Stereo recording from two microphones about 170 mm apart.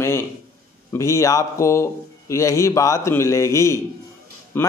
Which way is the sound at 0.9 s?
20° left (ahead or behind).